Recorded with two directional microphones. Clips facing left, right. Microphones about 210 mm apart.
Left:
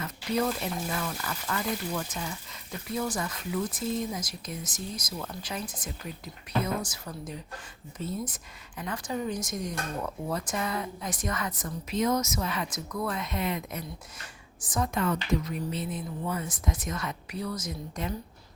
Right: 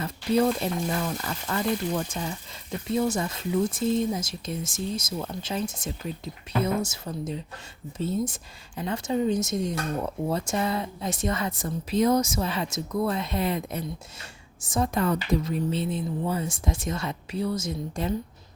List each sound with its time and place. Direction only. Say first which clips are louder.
0.0 s a woman's voice: right 6 dB; 30° right (ahead or behind)